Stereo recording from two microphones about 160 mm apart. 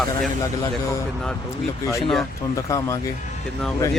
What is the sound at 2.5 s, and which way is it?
Speech, 20° left (ahead or behind).